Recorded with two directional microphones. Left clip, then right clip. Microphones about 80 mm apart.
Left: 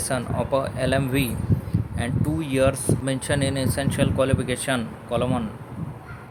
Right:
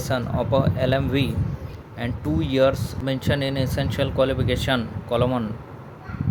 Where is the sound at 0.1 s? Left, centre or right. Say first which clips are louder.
Right 1 dB; centre.